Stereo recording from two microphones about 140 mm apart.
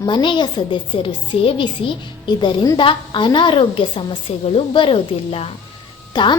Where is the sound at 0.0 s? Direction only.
35° left (ahead or behind).